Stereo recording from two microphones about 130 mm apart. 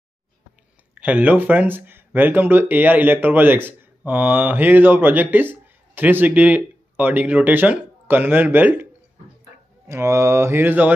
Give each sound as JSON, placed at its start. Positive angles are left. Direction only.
{"t": 0.9, "sound": "speech", "side_deg": -10}
{"t": 9.8, "sound": "mantra", "side_deg": -20}